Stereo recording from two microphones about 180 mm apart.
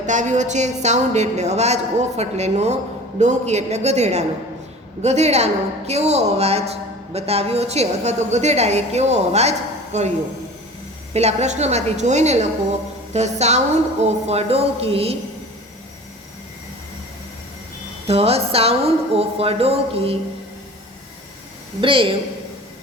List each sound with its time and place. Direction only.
0.0 s a woman's voice: 40° right (ahead or behind)
11.1 s a woman's voice: 35° right (ahead or behind)
18.1 s a woman's voice: 35° right (ahead or behind)
21.8 s speech: 30° right (ahead or behind)